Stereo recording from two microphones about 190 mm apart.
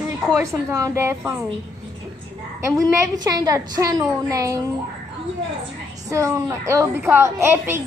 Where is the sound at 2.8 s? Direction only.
20° right (ahead or behind).